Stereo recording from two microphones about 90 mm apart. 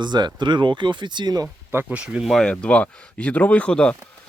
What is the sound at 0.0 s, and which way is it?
Speech, 55° right (ahead or behind).